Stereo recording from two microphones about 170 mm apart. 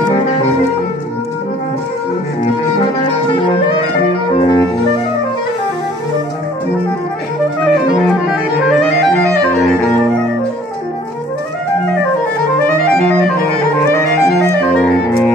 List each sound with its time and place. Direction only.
4.3 s music: 25° left (ahead or behind)
8.7 s clarinet: 5° left (ahead or behind)
13.0 s music: 5° left (ahead or behind)
13.8 s clarinet: 15° left (ahead or behind)